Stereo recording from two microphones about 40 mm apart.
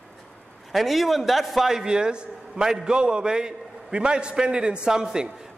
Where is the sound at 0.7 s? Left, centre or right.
Centre.